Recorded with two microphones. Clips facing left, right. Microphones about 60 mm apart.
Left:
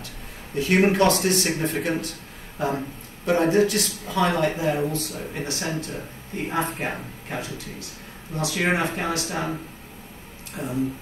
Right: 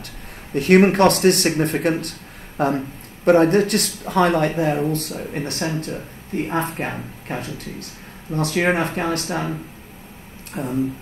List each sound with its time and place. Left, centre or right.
0.6 s speech: right
10.6 s speech: right